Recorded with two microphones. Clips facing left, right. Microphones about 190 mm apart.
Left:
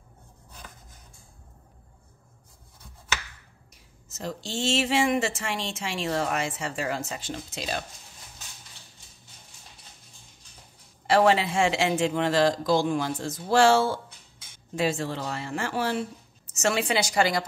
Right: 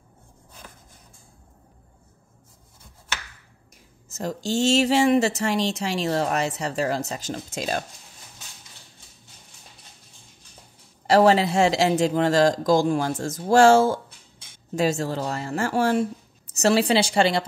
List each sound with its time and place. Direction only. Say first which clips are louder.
3.7 s speech: right 7 dB; 45° right (ahead or behind)
11.1 s speech: right 4 dB; 40° right (ahead or behind)
16.5 s a woman's voice: right 6 dB; 35° right (ahead or behind)